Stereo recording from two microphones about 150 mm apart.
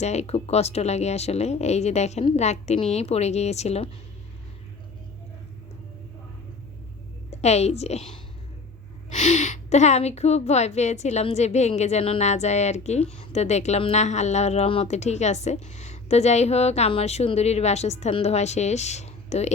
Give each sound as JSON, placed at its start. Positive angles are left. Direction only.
{"t": 0.0, "sound": "a woman's voice", "side_deg": 45}
{"t": 7.3, "sound": "a woman's voice", "side_deg": 45}
{"t": 9.0, "sound": "a woman's voice", "side_deg": 50}